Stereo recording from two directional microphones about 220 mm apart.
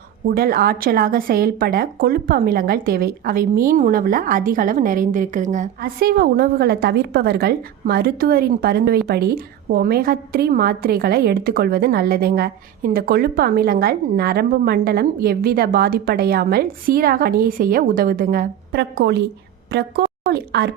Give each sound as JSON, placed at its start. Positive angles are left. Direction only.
{"t": 0.3, "sound": "a woman's voice", "side_deg": -40}
{"t": 20.0, "sound": "a sound", "side_deg": -50}
{"t": 20.3, "sound": "a woman's voice", "side_deg": -50}